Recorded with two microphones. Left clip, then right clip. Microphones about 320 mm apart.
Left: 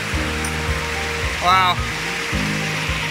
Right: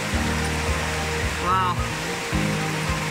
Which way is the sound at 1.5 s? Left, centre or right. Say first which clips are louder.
Left 7 dB; centre.